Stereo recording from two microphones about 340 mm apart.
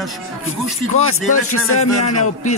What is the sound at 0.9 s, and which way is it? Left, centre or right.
Speech, left.